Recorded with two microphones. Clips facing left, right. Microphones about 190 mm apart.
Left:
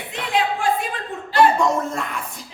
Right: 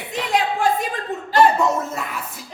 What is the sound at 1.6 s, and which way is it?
Speech, 5° right (ahead or behind).